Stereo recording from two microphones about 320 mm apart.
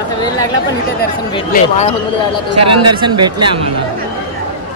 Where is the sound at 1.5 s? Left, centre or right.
Left.